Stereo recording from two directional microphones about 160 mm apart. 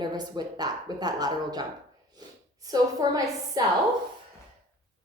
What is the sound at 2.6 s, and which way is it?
A woman's voice, 20° right (ahead or behind).